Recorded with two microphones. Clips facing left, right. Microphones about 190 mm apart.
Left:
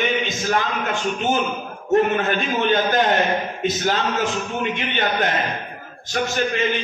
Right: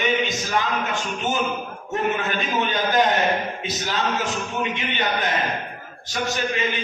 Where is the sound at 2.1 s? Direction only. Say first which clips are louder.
Left 3 dB; 45° left (ahead or behind).